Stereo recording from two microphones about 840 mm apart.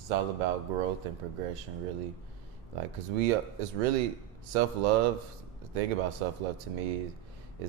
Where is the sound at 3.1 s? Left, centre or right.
Right.